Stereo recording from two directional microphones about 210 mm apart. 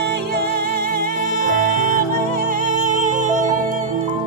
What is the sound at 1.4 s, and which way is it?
Music, 40° right (ahead or behind).